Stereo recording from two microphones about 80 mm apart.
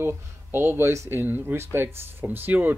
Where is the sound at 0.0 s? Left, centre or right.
Right.